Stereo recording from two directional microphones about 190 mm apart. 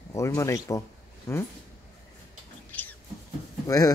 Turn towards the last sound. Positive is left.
turn(degrees=20)  # may be behind; listen again after turning